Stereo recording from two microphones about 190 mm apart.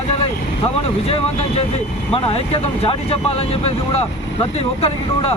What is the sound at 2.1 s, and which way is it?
Speech, 30° left (ahead or behind).